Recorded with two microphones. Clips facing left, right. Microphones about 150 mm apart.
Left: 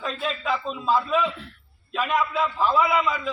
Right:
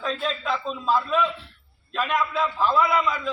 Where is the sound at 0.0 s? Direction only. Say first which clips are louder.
Right 1 dB; 5° left (ahead or behind).